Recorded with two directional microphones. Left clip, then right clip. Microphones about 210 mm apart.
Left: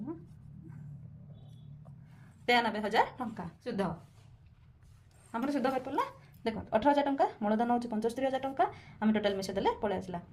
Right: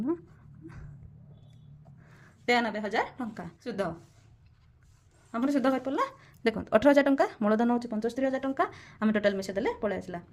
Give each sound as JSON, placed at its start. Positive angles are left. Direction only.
{"t": 2.5, "sound": "a woman's voice", "side_deg": -15}
{"t": 5.5, "sound": "a woman's voice", "side_deg": -25}